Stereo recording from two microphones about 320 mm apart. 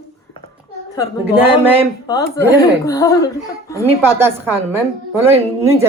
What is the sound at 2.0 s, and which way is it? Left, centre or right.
Speech, centre.